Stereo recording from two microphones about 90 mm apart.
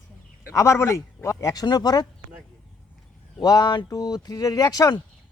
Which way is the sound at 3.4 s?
50° left (ahead or behind).